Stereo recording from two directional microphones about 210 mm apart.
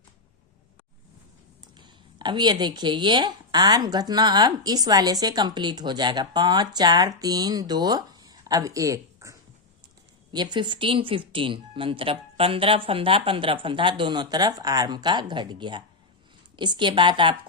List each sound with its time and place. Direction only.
1.6 s speech: 20° right (ahead or behind)